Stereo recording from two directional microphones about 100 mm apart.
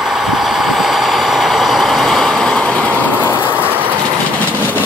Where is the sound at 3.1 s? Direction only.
20° right (ahead or behind).